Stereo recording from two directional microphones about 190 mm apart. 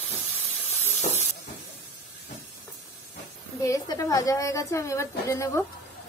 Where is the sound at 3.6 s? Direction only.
20° left (ahead or behind).